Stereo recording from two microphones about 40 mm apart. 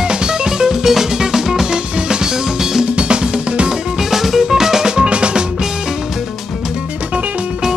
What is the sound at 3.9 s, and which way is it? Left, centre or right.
Music, centre.